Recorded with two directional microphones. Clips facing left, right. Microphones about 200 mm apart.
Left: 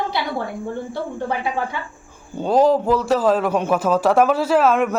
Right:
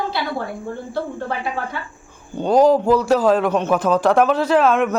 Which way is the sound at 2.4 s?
Centre (ahead or behind).